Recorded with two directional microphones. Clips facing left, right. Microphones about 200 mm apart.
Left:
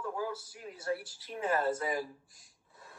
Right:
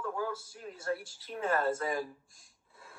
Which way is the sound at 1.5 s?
5° left (ahead or behind).